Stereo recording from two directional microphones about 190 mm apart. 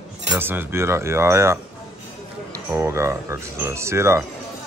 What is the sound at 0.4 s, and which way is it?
Speech, 10° right (ahead or behind).